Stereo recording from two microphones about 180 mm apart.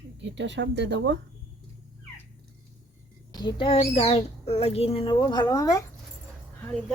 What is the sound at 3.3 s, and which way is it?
A child's voice, 25° left (ahead or behind).